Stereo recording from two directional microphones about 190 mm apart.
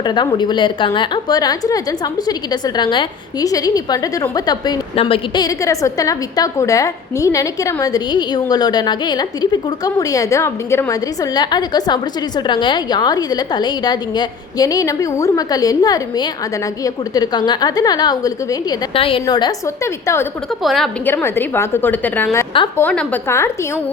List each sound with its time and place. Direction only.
0.0 s a woman's voice: 20° left (ahead or behind)
20.6 s a woman's voice: centre (ahead or behind)
21.1 s a woman's voice: 10° left (ahead or behind)